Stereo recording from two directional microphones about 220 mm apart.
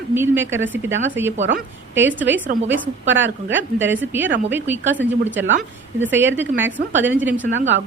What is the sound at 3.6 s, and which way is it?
A woman's voice, 10° right (ahead or behind).